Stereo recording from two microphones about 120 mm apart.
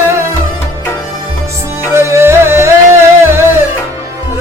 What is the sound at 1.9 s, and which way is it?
Music, 25° right (ahead or behind).